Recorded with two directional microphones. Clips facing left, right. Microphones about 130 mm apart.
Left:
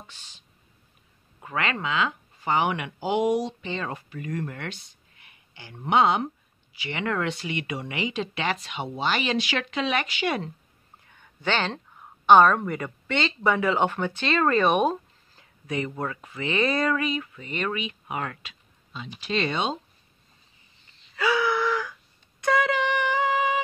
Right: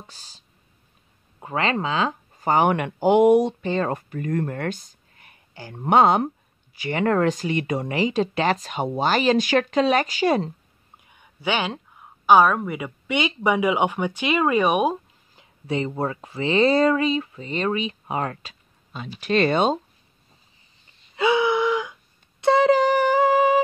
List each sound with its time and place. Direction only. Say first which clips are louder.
0.0 s speech: right 2 dB; 35° right (ahead or behind)
1.4 s speech: right 5 dB; 30° right (ahead or behind)
11.0 s speech: right 2 dB; 15° right (ahead or behind)
15.6 s speech: right 5 dB; 30° right (ahead or behind)
18.9 s speech: right 7 dB; 55° right (ahead or behind)
21.2 s gasp: right 4 dB; 20° right (ahead or behind)
22.4 s a sound: right 7 dB; 30° right (ahead or behind)